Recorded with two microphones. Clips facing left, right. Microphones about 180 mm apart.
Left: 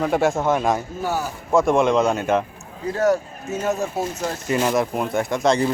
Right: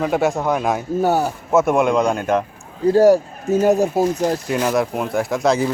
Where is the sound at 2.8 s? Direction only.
35° right (ahead or behind).